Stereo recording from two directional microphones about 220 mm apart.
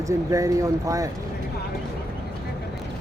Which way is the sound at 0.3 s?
15° right (ahead or behind).